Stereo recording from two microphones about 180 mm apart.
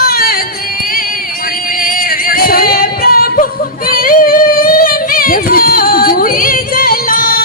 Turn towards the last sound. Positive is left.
turn(degrees=50)  # may be behind; listen again after turning